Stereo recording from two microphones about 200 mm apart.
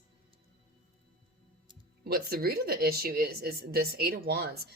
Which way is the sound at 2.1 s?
50° right (ahead or behind).